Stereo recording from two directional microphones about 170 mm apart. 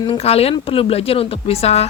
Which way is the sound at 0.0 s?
35° left (ahead or behind).